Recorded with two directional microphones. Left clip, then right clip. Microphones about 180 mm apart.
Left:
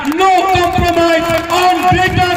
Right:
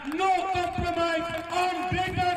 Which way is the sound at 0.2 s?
20° right (ahead or behind).